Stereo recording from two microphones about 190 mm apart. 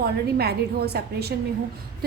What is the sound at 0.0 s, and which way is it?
A woman's voice, 55° right (ahead or behind).